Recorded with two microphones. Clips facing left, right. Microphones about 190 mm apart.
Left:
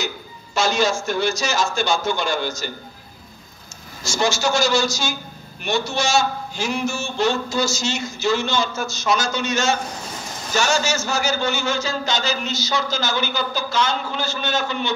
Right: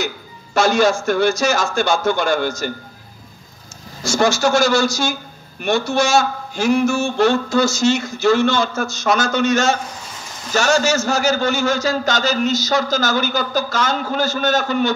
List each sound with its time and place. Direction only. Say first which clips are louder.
0.6 s a man's voice: right 5 dB; 55° right (ahead or behind)
4.0 s a man's voice: right 5 dB; 55° right (ahead or behind)
11.1 s speech: right 5 dB; 45° right (ahead or behind)